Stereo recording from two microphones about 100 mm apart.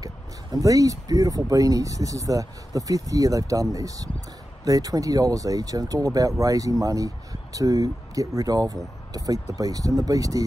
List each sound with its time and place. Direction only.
0.0 s speech: 35° right (ahead or behind)